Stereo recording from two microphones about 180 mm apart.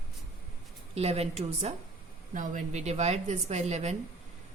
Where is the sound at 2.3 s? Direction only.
45° right (ahead or behind).